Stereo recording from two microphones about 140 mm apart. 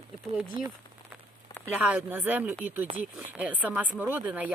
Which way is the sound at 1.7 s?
10° right (ahead or behind).